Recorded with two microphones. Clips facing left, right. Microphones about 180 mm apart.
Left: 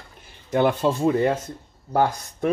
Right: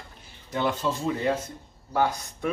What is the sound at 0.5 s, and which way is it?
Speech, 55° left (ahead or behind).